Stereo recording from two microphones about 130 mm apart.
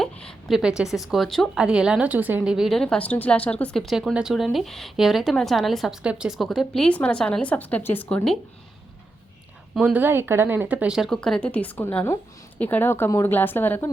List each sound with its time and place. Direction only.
0.0 s a woman's voice: 5° left (ahead or behind)
9.7 s a woman's voice: 10° right (ahead or behind); by 13.9 s 15° left (ahead or behind)